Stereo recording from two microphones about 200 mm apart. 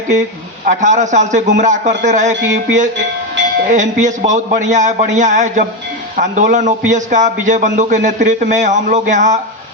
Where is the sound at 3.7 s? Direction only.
35° right (ahead or behind).